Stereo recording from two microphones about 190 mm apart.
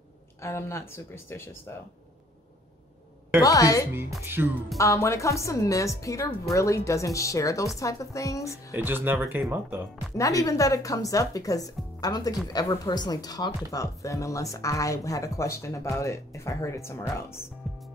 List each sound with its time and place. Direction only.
0.4 s speech: 15° left (ahead or behind)
3.4 s speech: 20° left (ahead or behind)
4.4 s speech: 10° right (ahead or behind)
4.7 s speech: 15° left (ahead or behind)
8.7 s speech: 10° right (ahead or behind)
10.1 s speech: 15° left (ahead or behind)